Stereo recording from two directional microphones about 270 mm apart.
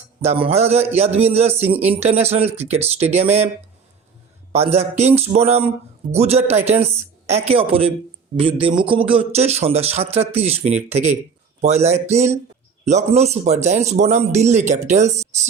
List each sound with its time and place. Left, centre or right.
0.2 s speech: right
4.5 s speech: right